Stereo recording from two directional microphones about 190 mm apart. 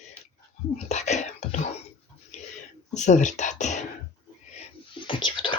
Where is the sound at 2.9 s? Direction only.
40° left (ahead or behind).